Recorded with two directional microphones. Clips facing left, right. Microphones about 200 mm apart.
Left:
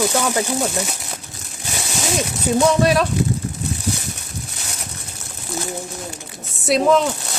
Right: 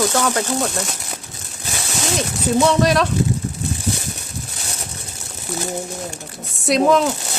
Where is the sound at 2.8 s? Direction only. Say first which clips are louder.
Even; 5° left (ahead or behind).